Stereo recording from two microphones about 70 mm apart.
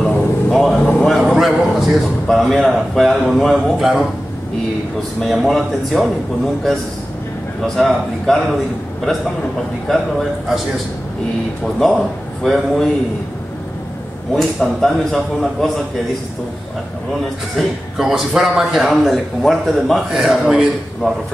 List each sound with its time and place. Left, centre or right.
0.0 s a sound: centre
1.3 s a man's voice: centre
5.2 s a man's voice: centre
7.6 s a man's voice: centre
9.8 s a man's voice: centre
11.6 s a man's voice: centre
14.3 s a man's voice: centre
17.6 s a man's voice: centre